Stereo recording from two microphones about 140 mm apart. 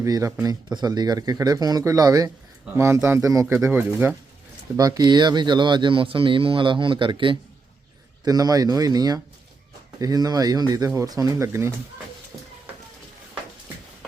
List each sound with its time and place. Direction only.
0.0 s speech: 20° right (ahead or behind)
4.8 s speech: 25° right (ahead or behind)